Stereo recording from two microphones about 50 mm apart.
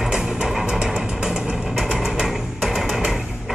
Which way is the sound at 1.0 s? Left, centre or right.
Centre.